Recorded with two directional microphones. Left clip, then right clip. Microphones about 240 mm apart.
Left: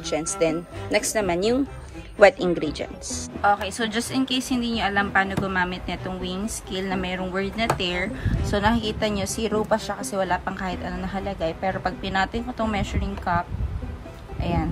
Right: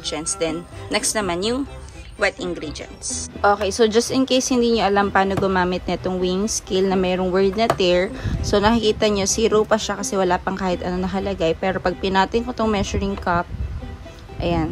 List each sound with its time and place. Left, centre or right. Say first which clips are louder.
0.0 s speech: left 1 dB; centre
3.4 s a woman's voice: right 5 dB; right